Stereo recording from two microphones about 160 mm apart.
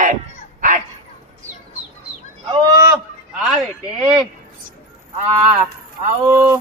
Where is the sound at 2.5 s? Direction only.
25° right (ahead or behind).